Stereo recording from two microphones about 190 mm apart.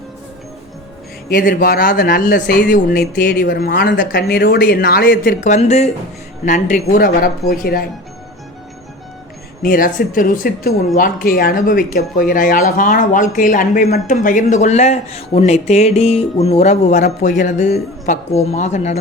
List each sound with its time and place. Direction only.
1.3 s speech: 45° left (ahead or behind)
9.6 s speech: 45° left (ahead or behind)